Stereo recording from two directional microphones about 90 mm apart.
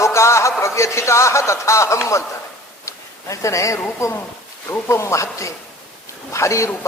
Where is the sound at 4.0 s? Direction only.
35° left (ahead or behind).